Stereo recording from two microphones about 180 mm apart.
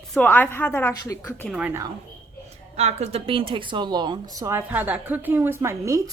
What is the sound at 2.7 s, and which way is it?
Speech, 35° right (ahead or behind).